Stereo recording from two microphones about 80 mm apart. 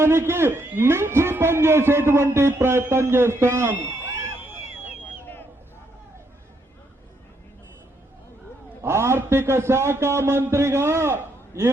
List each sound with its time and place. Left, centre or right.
0.0 s a man's voice: right
8.8 s a man's voice: right